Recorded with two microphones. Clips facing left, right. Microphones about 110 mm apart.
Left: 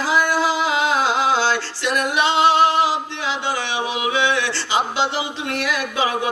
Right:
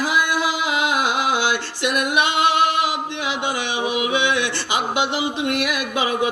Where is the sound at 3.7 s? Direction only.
15° right (ahead or behind).